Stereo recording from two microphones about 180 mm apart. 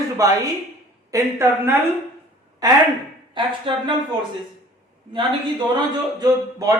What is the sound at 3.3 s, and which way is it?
Speech, 25° right (ahead or behind).